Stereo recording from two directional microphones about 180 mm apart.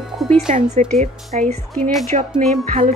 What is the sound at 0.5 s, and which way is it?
A woman's voice, 45° right (ahead or behind).